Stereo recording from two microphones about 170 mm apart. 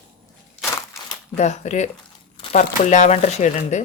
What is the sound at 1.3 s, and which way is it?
Speech, 40° left (ahead or behind).